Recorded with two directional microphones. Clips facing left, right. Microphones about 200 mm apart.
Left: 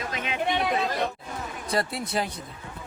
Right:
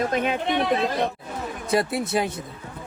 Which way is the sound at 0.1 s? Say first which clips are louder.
Right 5 dB; 50° right (ahead or behind).